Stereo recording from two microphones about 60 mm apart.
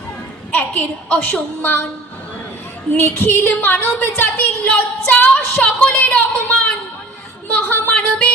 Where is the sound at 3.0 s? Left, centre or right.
Left; by 6.7 s centre.